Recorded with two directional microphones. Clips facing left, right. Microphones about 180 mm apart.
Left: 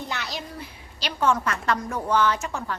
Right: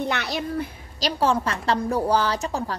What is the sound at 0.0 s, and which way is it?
Speech, 65° right (ahead or behind).